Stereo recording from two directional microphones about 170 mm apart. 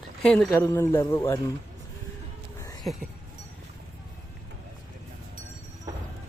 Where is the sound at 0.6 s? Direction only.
15° left (ahead or behind).